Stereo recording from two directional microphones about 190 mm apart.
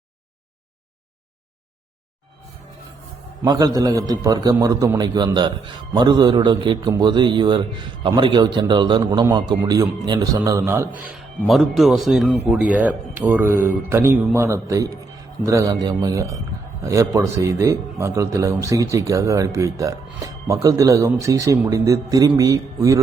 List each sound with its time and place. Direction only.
3.4 s a man's voice: 20° right (ahead or behind)
11.1 s speech: centre (ahead or behind); by 23.0 s 15° right (ahead or behind)